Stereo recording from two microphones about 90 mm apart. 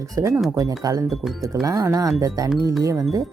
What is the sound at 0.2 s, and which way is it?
Speech, 35° right (ahead or behind).